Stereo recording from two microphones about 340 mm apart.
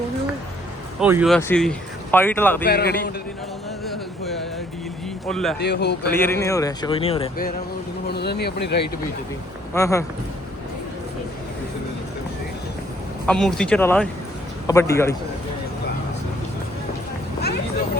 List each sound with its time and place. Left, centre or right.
0.9 s speech: centre
2.6 s speech: left
5.2 s speech: centre
5.5 s speech: left
6.1 s a man's voice: centre; by 8.9 s left
9.7 s a man's voice: centre
13.2 s a man's voice: centre